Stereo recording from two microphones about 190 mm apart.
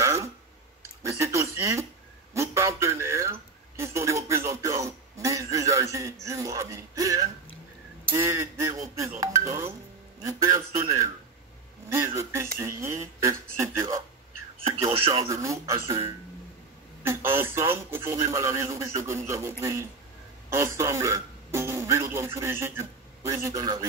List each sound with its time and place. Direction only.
0.0 s clicking: 15° right (ahead or behind)
1.0 s a man's voice: 15° right (ahead or behind)
2.3 s a sound: 15° right (ahead or behind)
6.2 s a man's voice: 15° right (ahead or behind)
15.0 s a man's voice: 15° right (ahead or behind)